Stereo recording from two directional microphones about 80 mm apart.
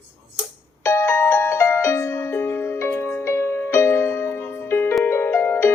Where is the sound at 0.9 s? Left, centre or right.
Left.